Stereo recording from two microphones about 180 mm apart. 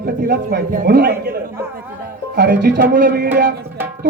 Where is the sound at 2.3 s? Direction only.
65° right (ahead or behind).